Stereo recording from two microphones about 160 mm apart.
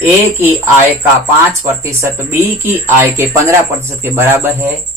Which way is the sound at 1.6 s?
15° right (ahead or behind).